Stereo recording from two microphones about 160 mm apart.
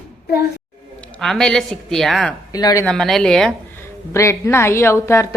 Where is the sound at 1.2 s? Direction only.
5° left (ahead or behind).